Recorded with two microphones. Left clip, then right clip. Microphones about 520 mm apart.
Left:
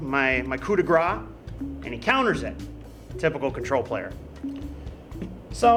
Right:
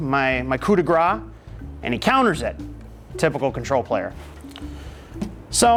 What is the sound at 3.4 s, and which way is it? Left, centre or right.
Speech, right.